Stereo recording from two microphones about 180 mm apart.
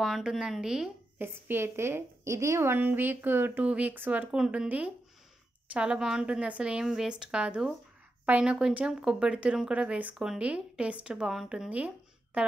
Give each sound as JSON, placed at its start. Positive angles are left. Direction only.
{"t": 0.0, "sound": "a woman's voice", "side_deg": 0}